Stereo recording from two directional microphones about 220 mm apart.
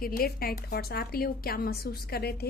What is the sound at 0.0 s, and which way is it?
A woman's voice, 40° left (ahead or behind).